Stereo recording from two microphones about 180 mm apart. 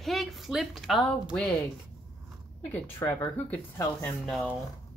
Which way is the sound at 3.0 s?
15° left (ahead or behind).